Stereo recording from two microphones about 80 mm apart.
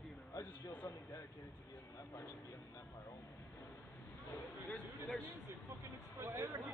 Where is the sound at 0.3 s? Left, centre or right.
Left.